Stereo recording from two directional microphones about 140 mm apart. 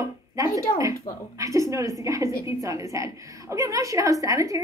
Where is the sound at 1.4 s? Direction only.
20° right (ahead or behind).